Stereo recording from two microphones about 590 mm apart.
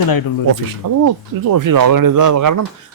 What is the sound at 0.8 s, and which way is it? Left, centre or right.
Speech, right.